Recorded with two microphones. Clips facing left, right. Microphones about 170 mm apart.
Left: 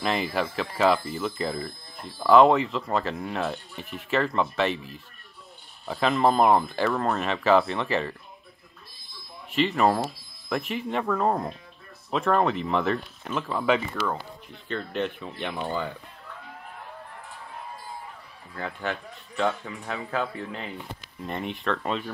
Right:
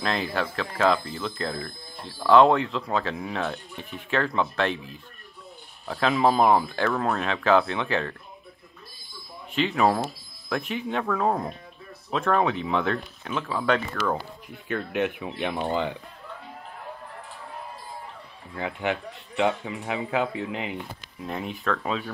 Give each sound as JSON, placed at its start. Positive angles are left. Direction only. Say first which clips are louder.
{"t": 0.0, "sound": "speech", "louder": "left 1 dB", "side_deg": 5}
{"t": 9.5, "sound": "speech", "louder": "even", "side_deg": 0}
{"t": 14.0, "sound": "speech", "louder": "right 3 dB", "side_deg": -10}
{"t": 18.6, "sound": "speech", "louder": "right 3 dB", "side_deg": -15}
{"t": 21.3, "sound": "speech", "louder": "even", "side_deg": 0}